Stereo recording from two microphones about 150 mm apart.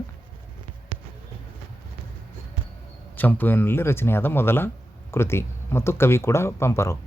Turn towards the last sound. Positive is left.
turn(degrees=15)  # may be behind; listen again after turning